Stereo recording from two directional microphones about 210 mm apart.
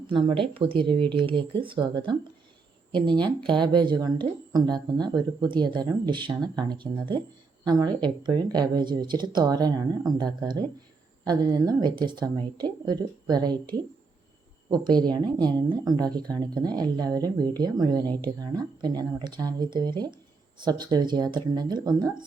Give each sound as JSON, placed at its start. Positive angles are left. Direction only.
{"t": 0.1, "sound": "speech", "side_deg": -25}
{"t": 18.0, "sound": "speech", "side_deg": 10}
{"t": 18.3, "sound": "speech", "side_deg": -20}